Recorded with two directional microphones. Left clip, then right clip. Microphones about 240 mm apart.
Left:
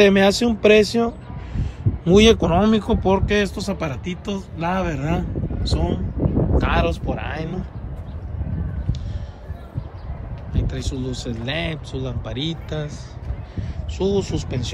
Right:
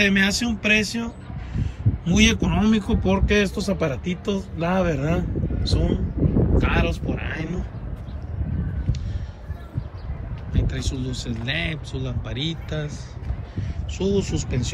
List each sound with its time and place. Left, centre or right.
0.0 s speech: centre
10.5 s speech: centre